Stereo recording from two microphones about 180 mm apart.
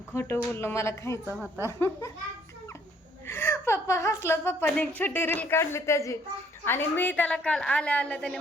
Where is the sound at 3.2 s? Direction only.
10° left (ahead or behind).